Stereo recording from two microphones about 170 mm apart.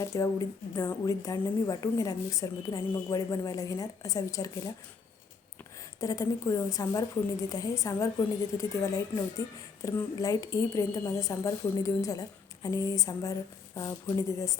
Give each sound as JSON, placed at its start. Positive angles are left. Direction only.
{"t": 0.0, "sound": "a woman's voice", "side_deg": 20}
{"t": 6.0, "sound": "a woman's voice", "side_deg": 20}